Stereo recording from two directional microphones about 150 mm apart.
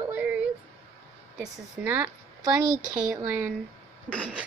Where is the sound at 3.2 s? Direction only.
15° right (ahead or behind).